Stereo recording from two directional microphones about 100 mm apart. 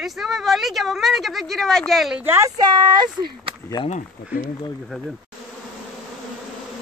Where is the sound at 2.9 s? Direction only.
45° right (ahead or behind).